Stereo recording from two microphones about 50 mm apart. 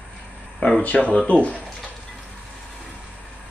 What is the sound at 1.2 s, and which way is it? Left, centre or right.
Speech, left.